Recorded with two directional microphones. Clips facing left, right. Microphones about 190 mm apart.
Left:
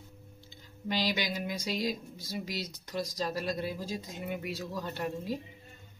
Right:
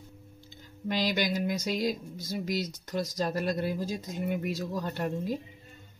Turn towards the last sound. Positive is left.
turn(degrees=-50)  # may be behind; listen again after turning